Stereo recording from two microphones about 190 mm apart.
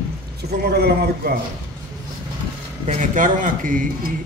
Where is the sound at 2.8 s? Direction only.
35° right (ahead or behind).